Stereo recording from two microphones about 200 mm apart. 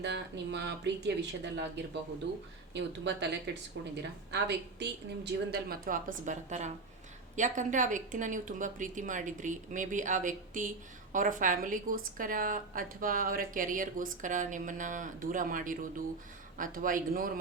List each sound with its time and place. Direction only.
0.0 s a woman's voice: 60° right (ahead or behind); by 17.4 s 45° right (ahead or behind)